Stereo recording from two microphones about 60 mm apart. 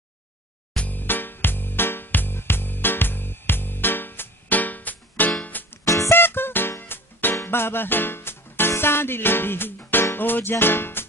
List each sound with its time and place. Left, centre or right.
0.7 s music: left
5.9 s music: left
6.1 s music: left